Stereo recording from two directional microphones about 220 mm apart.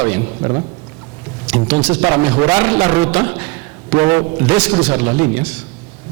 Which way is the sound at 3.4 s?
10° right (ahead or behind).